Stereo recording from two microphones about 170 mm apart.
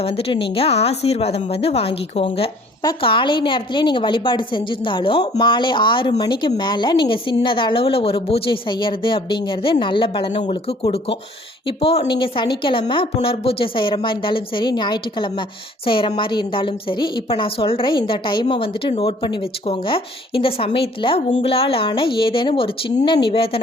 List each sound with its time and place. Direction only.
0.0 s a woman's voice: 35° left (ahead or behind)